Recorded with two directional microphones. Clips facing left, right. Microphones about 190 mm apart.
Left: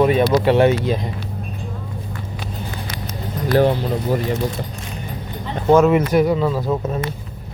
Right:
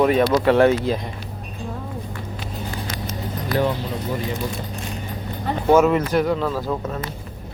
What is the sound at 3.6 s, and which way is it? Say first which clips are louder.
Speech: left 6 dB; 45° left (ahead or behind).